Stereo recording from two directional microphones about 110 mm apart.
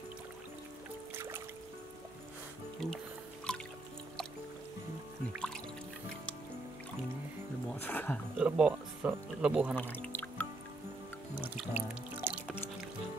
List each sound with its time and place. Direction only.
1.1 s music: 20° right (ahead or behind)
2.8 s speech: 5° left (ahead or behind)
3.5 s music: 10° left (ahead or behind)
7.8 s a sound: 15° left (ahead or behind)
8.4 s speech: 10° right (ahead or behind)
9.8 s music: 15° left (ahead or behind)
11.3 s music: 15° right (ahead or behind)